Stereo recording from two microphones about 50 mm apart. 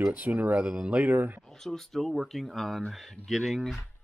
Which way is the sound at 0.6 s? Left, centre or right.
Centre.